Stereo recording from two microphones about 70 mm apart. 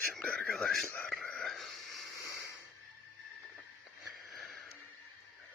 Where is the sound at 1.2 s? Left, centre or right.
Centre.